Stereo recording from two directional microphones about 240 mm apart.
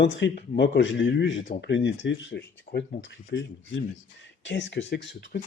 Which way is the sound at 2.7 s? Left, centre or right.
Left.